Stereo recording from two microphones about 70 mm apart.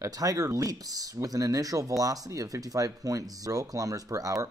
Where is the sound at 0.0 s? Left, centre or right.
Right.